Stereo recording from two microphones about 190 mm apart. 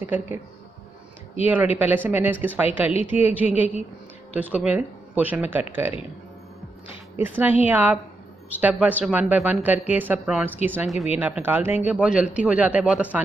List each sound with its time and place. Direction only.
0.0 s speech: 10° right (ahead or behind)
1.4 s speech: 10° right (ahead or behind)
2.9 s a woman's voice: 30° left (ahead or behind)
3.3 s speech: 10° right (ahead or behind)
7.2 s speech: 10° right (ahead or behind)